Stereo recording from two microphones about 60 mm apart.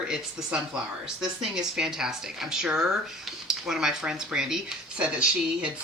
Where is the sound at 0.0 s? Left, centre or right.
Centre.